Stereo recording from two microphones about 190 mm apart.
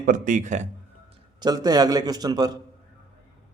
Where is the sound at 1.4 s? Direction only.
20° right (ahead or behind).